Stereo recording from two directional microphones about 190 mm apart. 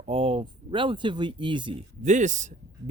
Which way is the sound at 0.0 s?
30° right (ahead or behind).